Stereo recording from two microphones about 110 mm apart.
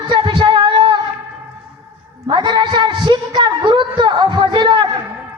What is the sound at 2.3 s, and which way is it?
A woman's voice, 45° right (ahead or behind).